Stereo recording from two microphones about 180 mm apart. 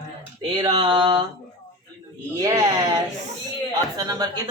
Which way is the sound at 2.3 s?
20° right (ahead or behind).